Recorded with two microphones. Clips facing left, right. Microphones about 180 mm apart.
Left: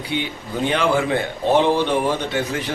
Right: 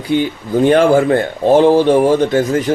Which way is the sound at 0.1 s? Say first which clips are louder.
Right 11 dB; 45° right (ahead or behind).